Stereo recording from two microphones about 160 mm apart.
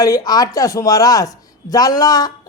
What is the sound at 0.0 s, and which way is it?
Speech, 25° left (ahead or behind).